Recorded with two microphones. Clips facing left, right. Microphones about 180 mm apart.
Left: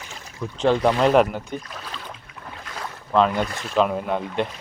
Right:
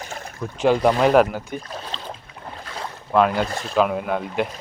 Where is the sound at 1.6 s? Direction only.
30° right (ahead or behind).